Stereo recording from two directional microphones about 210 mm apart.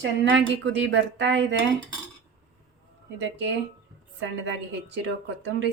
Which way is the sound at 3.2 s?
55° right (ahead or behind).